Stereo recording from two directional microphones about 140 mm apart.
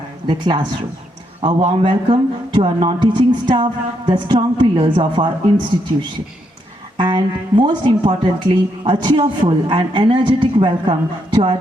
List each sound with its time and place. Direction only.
0.3 s speech: 35° right (ahead or behind)
6.9 s speech: 35° right (ahead or behind)